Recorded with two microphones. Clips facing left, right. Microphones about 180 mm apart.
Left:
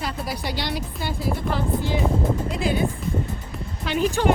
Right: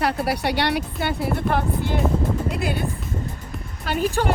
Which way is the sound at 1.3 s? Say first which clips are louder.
Right 2 dB; 60° right (ahead or behind).